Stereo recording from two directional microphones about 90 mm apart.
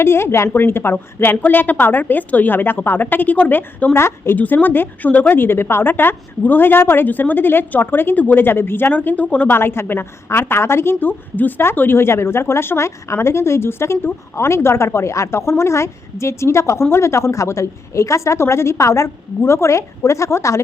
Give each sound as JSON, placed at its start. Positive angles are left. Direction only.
{"t": 0.0, "sound": "a woman's voice", "side_deg": 25}